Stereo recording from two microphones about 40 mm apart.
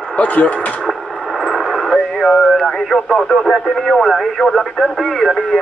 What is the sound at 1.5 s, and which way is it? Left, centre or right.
Speech, centre.